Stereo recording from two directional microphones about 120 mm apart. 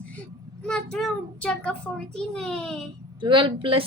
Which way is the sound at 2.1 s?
5° left (ahead or behind).